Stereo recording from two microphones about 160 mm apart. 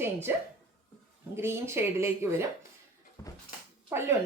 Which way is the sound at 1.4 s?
15° right (ahead or behind).